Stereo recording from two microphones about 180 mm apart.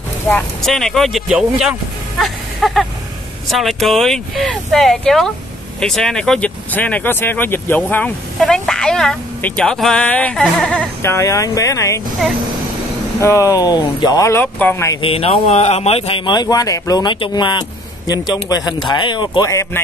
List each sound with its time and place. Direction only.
0.3 s speech: centre (ahead or behind)
13.2 s speech: 15° left (ahead or behind)
15.0 s speech: 30° left (ahead or behind); by 19.8 s 15° left (ahead or behind)